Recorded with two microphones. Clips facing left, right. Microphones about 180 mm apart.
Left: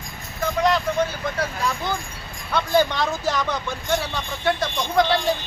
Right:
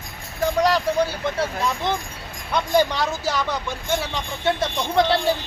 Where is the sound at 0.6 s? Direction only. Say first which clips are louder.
Even; 35° right (ahead or behind).